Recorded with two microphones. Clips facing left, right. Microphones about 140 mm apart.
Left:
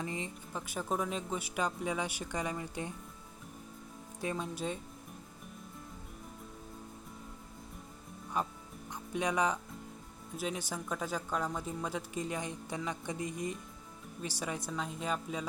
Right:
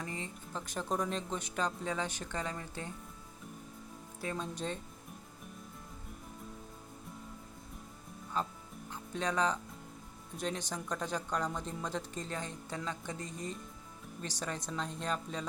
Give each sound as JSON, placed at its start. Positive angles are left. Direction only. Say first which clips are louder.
{"t": 0.0, "sound": "speech", "louder": "left 3 dB", "side_deg": 20}
{"t": 4.2, "sound": "speech", "louder": "left 2 dB", "side_deg": 15}
{"t": 8.4, "sound": "speech", "louder": "left 1 dB", "side_deg": 15}
{"t": 8.9, "sound": "music", "louder": "left 2 dB", "side_deg": 15}
{"t": 10.3, "sound": "speech", "louder": "even", "side_deg": 5}